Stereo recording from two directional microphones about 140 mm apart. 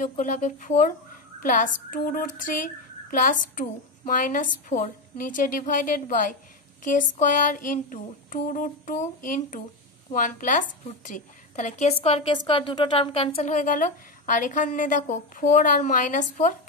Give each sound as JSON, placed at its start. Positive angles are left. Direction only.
{"t": 0.0, "sound": "speech", "side_deg": 65}
{"t": 1.4, "sound": "child singing", "side_deg": 75}
{"t": 10.1, "sound": "a woman's voice", "side_deg": 70}
{"t": 13.4, "sound": "child singing", "side_deg": 65}